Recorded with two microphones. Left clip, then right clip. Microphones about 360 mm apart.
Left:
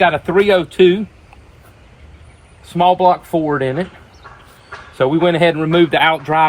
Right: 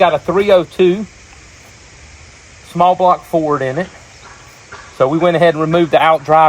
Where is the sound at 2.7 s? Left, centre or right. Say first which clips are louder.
Right 1 dB; centre.